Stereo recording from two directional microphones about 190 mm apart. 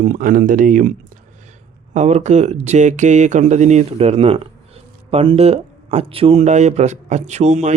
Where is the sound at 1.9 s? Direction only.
35° right (ahead or behind).